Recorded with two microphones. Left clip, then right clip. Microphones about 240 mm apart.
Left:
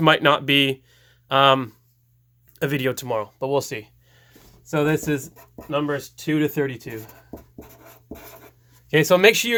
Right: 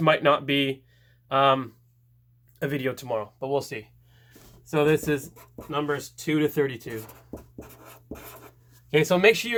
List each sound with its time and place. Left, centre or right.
0.0 s speech: left
4.7 s speech: left
5.3 s speech: centre
5.7 s speech: left
7.9 s scratch: centre
8.9 s speech: left